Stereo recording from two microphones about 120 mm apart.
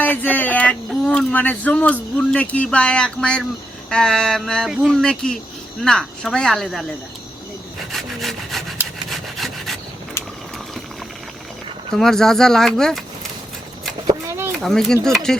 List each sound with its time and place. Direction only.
0.0 s speech: 15° left (ahead or behind)
7.9 s sawing: centre (ahead or behind)
9.0 s rub: centre (ahead or behind)
11.9 s speech: 5° left (ahead or behind)
14.6 s speech: 5° left (ahead or behind)